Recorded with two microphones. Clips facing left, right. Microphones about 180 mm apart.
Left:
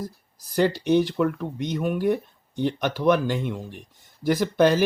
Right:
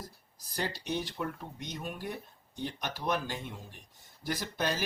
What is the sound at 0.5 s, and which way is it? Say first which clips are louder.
Speech: left 15 dB; 75° left (ahead or behind).